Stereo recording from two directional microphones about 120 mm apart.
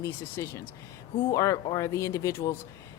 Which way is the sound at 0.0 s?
25° left (ahead or behind).